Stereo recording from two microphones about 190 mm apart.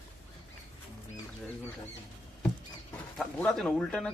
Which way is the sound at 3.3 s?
5° left (ahead or behind).